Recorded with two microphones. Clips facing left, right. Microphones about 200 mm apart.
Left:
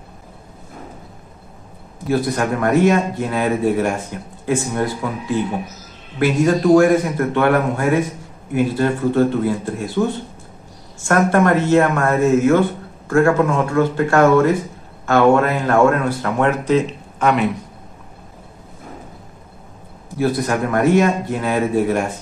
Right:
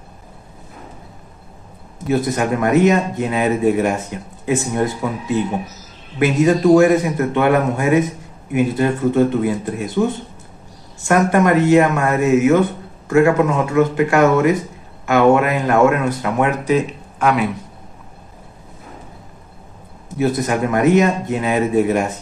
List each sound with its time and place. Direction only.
2.0 s speech: 20° right (ahead or behind)
17.2 s speech: 5° right (ahead or behind)
20.2 s speech: 20° right (ahead or behind)